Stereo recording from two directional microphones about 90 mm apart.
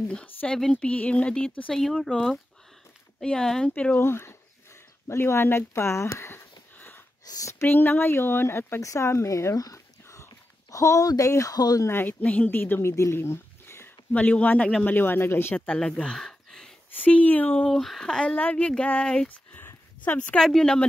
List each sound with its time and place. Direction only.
0.1 s speech: 15° left (ahead or behind)
1.7 s speech: centre (ahead or behind)
3.2 s speech: 5° left (ahead or behind)
4.0 s speech: 30° left (ahead or behind)
5.0 s sniff: 30° left (ahead or behind)
7.2 s speech: 35° left (ahead or behind)
7.6 s speech: 20° left (ahead or behind); by 11.9 s 45° left (ahead or behind)
11.9 s speech: 20° left (ahead or behind)
12.9 s a sound: 30° left (ahead or behind)
14.1 s speech: 15° left (ahead or behind)
15.5 s speech: 10° left (ahead or behind)
16.9 s speech: 20° left (ahead or behind)
17.6 s speech: 5° left (ahead or behind)